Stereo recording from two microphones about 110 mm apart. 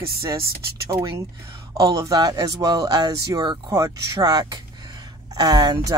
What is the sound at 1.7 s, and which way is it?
Speech, 35° right (ahead or behind).